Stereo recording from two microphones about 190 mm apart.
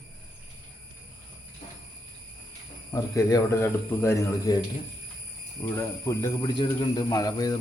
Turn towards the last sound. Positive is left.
turn(degrees=20)  # may be behind; listen again after turning